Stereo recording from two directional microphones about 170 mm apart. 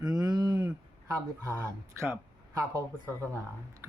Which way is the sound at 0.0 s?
20° right (ahead or behind).